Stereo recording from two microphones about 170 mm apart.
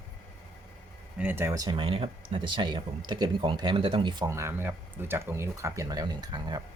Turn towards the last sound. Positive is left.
turn(degrees=-25)  # may be behind; listen again after turning